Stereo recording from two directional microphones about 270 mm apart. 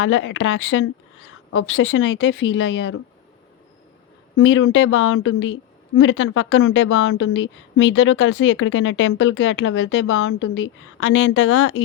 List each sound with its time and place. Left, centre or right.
0.0 s a woman's voice: left
4.4 s a woman's voice: left